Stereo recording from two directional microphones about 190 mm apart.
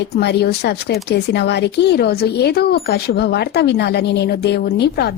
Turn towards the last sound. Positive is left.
turn(degrees=60)  # may be behind; listen again after turning